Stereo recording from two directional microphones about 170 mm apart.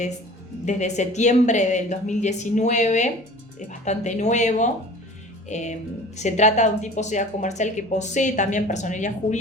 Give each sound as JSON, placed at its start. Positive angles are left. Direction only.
{"t": 0.6, "sound": "a woman's voice", "side_deg": 45}